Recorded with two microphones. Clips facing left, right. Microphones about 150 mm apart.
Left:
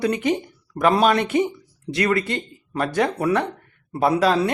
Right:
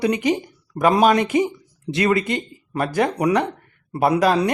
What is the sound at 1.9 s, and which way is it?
Speech, 25° right (ahead or behind).